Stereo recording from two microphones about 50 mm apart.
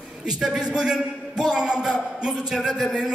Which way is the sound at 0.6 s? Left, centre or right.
Centre.